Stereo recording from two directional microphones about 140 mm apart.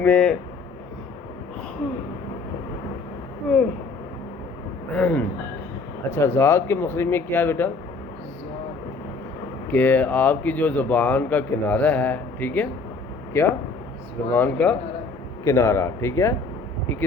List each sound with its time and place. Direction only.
0.0 s a man's voice: 10° left (ahead or behind)
4.9 s a man's voice: 10° left (ahead or behind)
9.7 s a man's voice: 10° left (ahead or behind)